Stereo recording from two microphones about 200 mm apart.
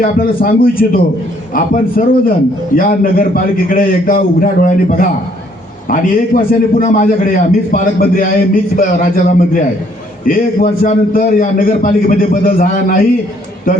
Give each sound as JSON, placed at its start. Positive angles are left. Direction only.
{"t": 0.0, "sound": "a man's voice", "side_deg": 45}